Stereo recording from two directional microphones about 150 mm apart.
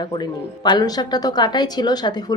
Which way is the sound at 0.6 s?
25° left (ahead or behind).